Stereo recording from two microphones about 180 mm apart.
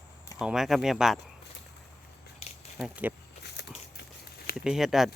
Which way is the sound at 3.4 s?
70° left (ahead or behind).